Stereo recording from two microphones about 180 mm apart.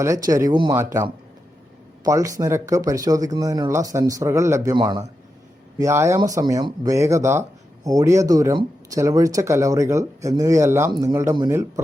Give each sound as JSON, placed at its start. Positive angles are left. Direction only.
{"t": 0.0, "sound": "speech", "side_deg": -20}
{"t": 2.0, "sound": "speech", "side_deg": -20}